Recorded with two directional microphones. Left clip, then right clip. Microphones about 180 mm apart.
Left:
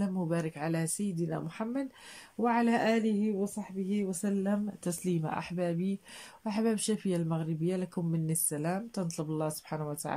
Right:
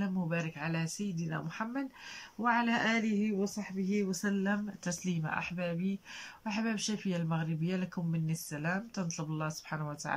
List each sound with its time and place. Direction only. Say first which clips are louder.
0.0 s speech: left 3 dB; 30° left (ahead or behind)